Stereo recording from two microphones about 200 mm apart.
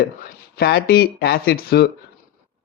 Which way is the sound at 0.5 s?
55° left (ahead or behind).